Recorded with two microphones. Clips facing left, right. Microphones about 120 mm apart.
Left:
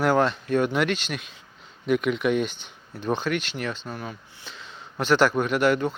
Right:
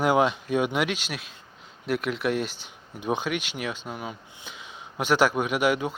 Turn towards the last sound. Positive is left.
turn(degrees=-10)  # may be behind; listen again after turning